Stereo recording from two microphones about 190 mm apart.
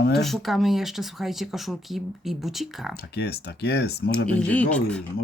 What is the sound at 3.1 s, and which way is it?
Speech, 60° left (ahead or behind).